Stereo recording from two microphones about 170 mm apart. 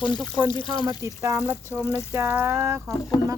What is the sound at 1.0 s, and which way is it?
Speech, 15° right (ahead or behind).